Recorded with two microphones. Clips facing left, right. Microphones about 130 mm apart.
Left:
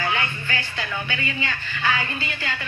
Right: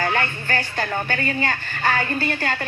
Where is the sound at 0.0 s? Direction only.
45° right (ahead or behind).